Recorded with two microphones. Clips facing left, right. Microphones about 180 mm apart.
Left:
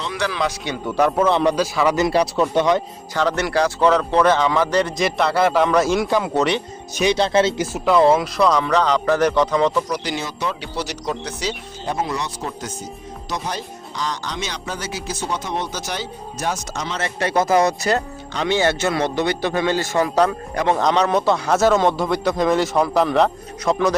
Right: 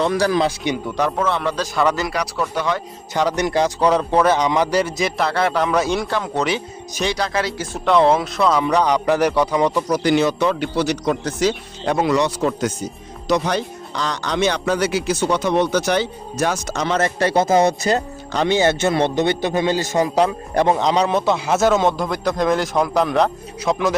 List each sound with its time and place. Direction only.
0.0 s a man's voice: 45° right (ahead or behind)
0.9 s speech: 5° left (ahead or behind)
1.3 s speech: 15° left (ahead or behind)
1.7 s speech: 5° left (ahead or behind)
2.0 s speech: 25° left (ahead or behind)
3.2 s speech: 15° right (ahead or behind)
7.0 s speech: 25° left (ahead or behind)
7.7 s speech: 5° left (ahead or behind); by 9.8 s 15° right (ahead or behind)
9.9 s speech: 55° right (ahead or behind)
11.9 s speech: 75° right (ahead or behind)
13.2 s speech: 70° right (ahead or behind)
17.0 s speech: 35° right (ahead or behind); by 24.0 s centre (ahead or behind)